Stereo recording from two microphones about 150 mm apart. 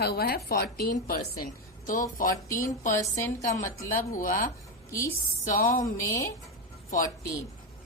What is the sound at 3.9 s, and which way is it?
Speech, 60° left (ahead or behind).